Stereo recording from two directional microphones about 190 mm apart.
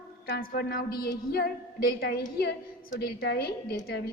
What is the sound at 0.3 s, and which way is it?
A woman's voice, 55° left (ahead or behind).